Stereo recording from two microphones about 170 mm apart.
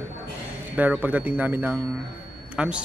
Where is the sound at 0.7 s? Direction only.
10° right (ahead or behind).